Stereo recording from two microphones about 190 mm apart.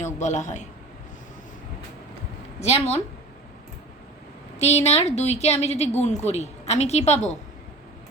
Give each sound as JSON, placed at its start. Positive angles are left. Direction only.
{"t": 0.0, "sound": "a woman's voice", "side_deg": 40}
{"t": 2.6, "sound": "a woman's voice", "side_deg": 35}
{"t": 4.6, "sound": "a woman's voice", "side_deg": 35}